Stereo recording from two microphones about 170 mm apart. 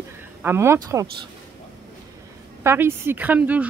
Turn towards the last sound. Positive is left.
turn(degrees=-10)  # may be behind; listen again after turning